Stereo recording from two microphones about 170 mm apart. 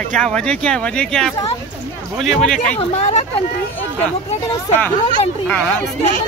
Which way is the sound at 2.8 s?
40° left (ahead or behind).